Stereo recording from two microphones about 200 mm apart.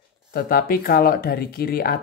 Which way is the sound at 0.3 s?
50° left (ahead or behind).